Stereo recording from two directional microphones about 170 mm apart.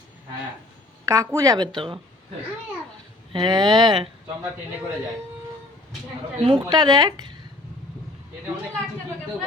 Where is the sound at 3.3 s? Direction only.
25° right (ahead or behind).